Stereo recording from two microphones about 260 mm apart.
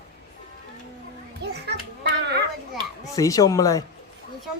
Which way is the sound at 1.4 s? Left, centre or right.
Right.